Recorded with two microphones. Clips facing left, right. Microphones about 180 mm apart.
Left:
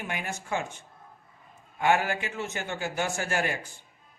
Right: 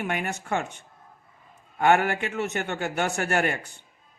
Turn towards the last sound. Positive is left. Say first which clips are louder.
# right 4 dB
turn(degrees=-65)  # may be behind; listen again after turning